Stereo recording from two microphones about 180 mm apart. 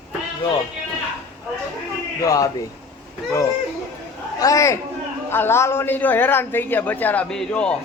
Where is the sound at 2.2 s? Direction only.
20° left (ahead or behind).